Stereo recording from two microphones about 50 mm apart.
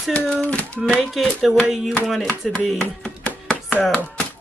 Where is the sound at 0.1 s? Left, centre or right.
Left.